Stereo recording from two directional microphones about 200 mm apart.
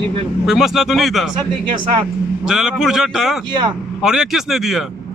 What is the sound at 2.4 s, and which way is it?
A man's voice, centre (ahead or behind).